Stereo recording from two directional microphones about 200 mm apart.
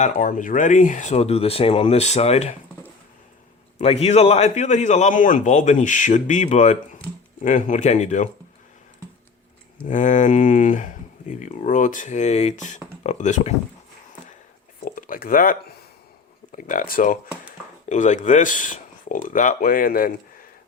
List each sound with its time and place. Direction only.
0.0 s speech: 40° left (ahead or behind)
3.8 s speech: 30° left (ahead or behind)
9.9 s speech: 40° left (ahead or behind)
14.8 s speech: 45° left (ahead or behind)